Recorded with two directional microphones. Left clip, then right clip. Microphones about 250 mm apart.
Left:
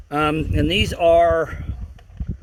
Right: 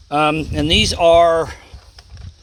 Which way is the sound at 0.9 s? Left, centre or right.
Right.